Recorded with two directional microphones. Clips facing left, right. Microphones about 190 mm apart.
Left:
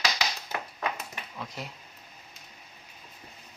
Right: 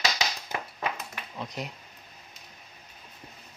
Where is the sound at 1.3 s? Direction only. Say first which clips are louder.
Right 4 dB; 20° right (ahead or behind).